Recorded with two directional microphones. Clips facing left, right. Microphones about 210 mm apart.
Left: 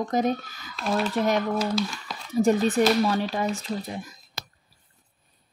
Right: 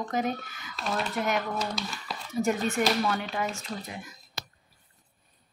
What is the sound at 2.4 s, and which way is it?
Speech, 35° left (ahead or behind).